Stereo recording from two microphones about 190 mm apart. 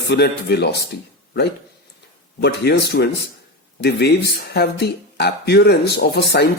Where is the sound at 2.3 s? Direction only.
60° left (ahead or behind).